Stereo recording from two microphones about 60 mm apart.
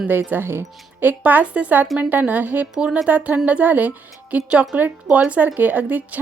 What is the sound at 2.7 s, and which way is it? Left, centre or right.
A woman's voice, centre.